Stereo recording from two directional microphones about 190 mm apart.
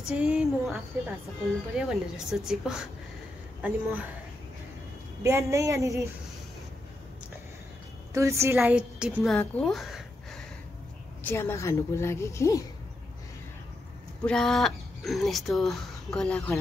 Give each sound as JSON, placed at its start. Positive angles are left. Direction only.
{"t": 0.1, "sound": "a woman's voice", "side_deg": -5}
{"t": 5.2, "sound": "a woman's voice", "side_deg": -15}
{"t": 8.1, "sound": "a woman's voice", "side_deg": -15}
{"t": 11.2, "sound": "a woman's voice", "side_deg": 15}
{"t": 14.2, "sound": "speech", "side_deg": 5}